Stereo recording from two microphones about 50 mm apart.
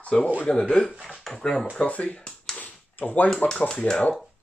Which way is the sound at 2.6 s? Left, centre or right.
Left.